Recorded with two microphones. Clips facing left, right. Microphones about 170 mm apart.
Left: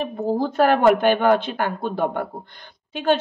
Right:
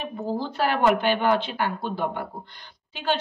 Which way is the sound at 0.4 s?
50° left (ahead or behind).